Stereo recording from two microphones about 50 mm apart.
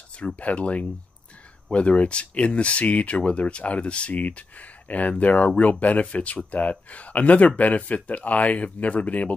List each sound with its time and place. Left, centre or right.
0.4 s speech: left